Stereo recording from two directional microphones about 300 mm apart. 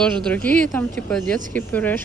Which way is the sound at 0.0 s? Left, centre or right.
Centre.